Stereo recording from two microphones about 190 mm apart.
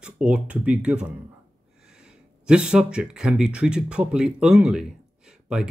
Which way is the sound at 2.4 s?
5° right (ahead or behind).